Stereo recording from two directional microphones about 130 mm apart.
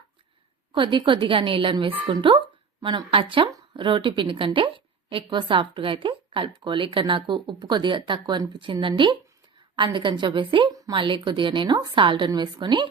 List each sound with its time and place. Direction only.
0.7 s speech: 40° right (ahead or behind)
10.8 s a sound: 30° right (ahead or behind)
11.0 s speech: 40° right (ahead or behind)